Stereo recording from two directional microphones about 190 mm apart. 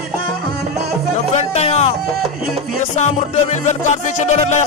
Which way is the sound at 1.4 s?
35° left (ahead or behind).